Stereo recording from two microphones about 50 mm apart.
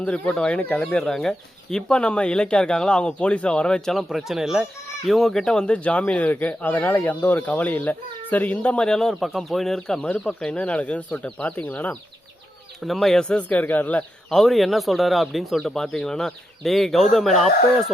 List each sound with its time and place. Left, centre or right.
0.0 s speech: left
4.1 s speech: centre
5.0 s speech: centre
5.6 s speech: left
8.9 s speech: centre
10.0 s speech: left
12.8 s speech: centre
13.2 s speech: left
14.3 s speech: centre